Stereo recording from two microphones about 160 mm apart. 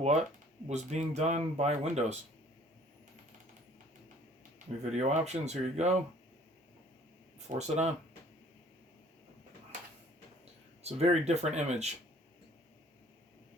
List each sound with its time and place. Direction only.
0.0 s speech: 45° right (ahead or behind)
4.9 s speech: 45° right (ahead or behind)
7.3 s speech: 45° right (ahead or behind)
10.8 s speech: 40° right (ahead or behind)